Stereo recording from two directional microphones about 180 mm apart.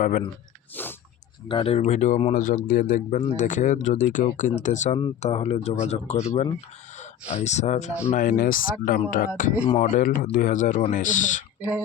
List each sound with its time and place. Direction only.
0.0 s speech: 45° left (ahead or behind)
0.8 s speech: 10° left (ahead or behind)
1.5 s a man's voice: 30° left (ahead or behind)
8.1 s speech: 50° left (ahead or behind)
9.6 s speech: 40° left (ahead or behind)